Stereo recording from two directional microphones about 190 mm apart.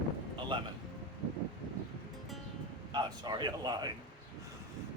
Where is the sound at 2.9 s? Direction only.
20° right (ahead or behind).